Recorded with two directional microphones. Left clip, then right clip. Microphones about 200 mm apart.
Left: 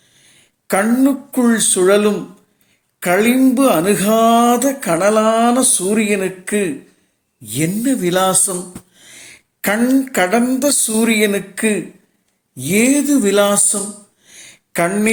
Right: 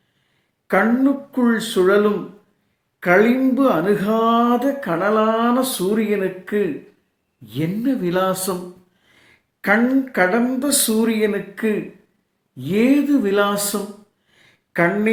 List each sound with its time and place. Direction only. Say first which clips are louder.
0.7 s speech: left 2 dB; 35° left (ahead or behind)
9.6 s speech: left 1 dB; 40° left (ahead or behind)
14.7 s speech: left 2 dB; 40° left (ahead or behind)